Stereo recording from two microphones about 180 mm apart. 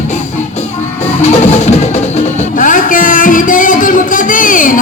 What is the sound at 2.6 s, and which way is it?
Music, 45° left (ahead or behind).